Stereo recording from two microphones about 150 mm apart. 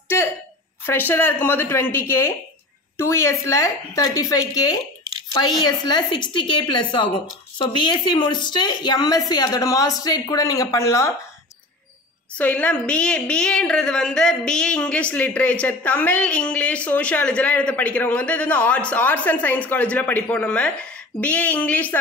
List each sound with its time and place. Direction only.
0.8 s a woman's voice: 15° left (ahead or behind)
12.4 s a woman's voice: 10° left (ahead or behind)